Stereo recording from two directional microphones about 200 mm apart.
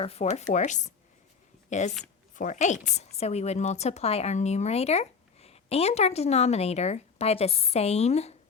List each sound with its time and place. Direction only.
0.0 s a woman's voice: 30° left (ahead or behind)